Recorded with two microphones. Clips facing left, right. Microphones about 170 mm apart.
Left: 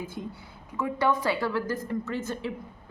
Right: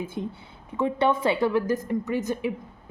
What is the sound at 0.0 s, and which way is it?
A woman's voice, 25° right (ahead or behind).